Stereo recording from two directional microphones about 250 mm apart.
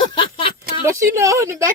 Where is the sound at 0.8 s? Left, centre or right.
Centre.